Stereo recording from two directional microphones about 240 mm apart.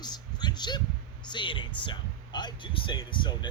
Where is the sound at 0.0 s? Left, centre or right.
Centre.